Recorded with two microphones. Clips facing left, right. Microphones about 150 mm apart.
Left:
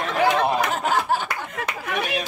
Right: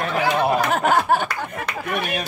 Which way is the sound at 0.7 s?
60° right (ahead or behind).